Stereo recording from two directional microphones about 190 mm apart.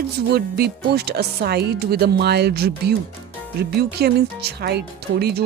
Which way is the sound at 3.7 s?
60° right (ahead or behind).